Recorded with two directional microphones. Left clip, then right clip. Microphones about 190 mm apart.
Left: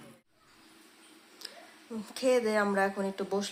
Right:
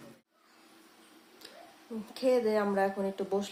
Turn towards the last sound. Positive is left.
turn(degrees=-5)  # may be behind; listen again after turning